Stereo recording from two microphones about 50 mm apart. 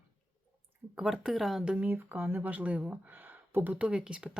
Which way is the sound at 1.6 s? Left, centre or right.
Centre.